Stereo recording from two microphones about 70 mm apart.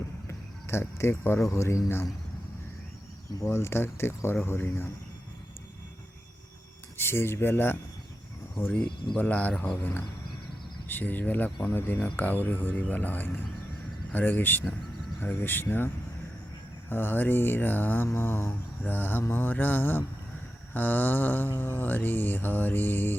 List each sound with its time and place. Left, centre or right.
0.3 s speech: left
3.4 s speech: left
6.9 s speech: left
9.1 s mantra: left
16.9 s mantra: left
18.1 s speech: left
18.8 s mantra: left